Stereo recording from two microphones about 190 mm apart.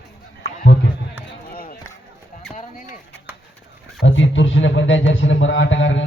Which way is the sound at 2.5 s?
40° left (ahead or behind).